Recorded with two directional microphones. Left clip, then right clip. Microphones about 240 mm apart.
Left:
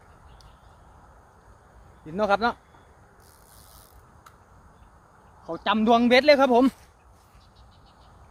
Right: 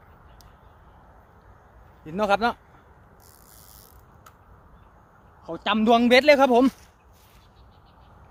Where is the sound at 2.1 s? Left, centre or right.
Right.